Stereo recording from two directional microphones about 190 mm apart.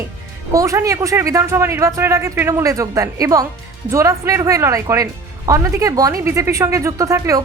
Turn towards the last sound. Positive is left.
turn(degrees=-15)  # may be behind; listen again after turning